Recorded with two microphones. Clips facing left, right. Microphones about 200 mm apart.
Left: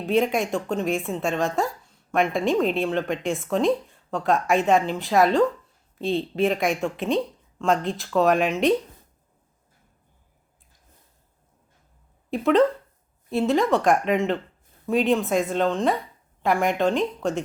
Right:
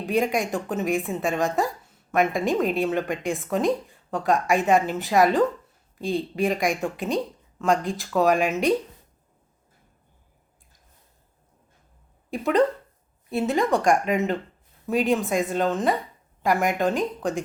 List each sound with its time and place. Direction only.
0.0 s a woman's voice: centre (ahead or behind)
12.3 s a woman's voice: centre (ahead or behind)